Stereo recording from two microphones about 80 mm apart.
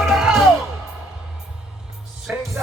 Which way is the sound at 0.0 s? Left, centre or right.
Centre.